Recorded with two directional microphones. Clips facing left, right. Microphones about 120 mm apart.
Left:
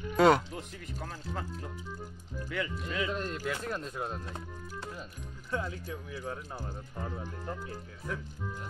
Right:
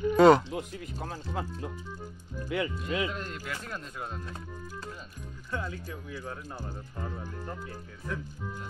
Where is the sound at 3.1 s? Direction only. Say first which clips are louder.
Left 3 dB; 35° left (ahead or behind).